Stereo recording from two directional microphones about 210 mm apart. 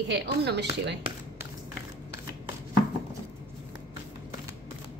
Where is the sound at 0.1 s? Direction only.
55° right (ahead or behind).